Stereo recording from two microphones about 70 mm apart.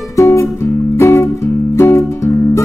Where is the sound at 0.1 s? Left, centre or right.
Left.